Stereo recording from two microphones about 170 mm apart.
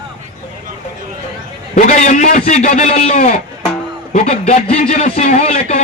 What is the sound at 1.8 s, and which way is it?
A man's voice, 45° left (ahead or behind).